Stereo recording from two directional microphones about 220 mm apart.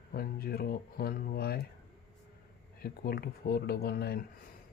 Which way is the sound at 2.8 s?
45° left (ahead or behind).